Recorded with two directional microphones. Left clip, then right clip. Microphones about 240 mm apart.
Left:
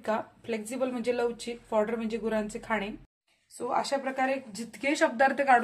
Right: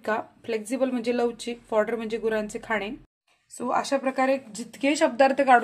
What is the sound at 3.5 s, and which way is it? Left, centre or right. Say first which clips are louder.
A woman's voice: right 4 dB; right.